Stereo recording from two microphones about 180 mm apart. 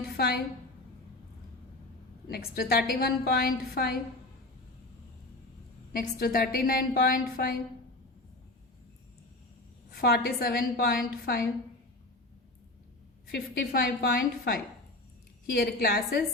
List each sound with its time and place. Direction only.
0.0 s a sound: 60° left (ahead or behind)
2.3 s a woman's voice: 60° left (ahead or behind)
5.9 s a woman's voice: 55° left (ahead or behind)
9.9 s a woman's voice: 60° left (ahead or behind)
13.3 s a woman's voice: 60° left (ahead or behind)